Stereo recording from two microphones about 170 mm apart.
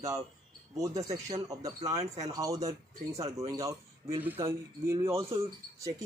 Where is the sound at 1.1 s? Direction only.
20° right (ahead or behind).